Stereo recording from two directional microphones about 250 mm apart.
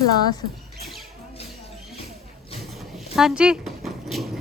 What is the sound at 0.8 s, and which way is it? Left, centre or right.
Music, centre.